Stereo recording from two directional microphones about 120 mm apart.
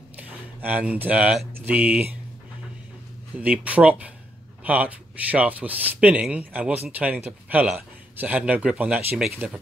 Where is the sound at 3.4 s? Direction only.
10° right (ahead or behind).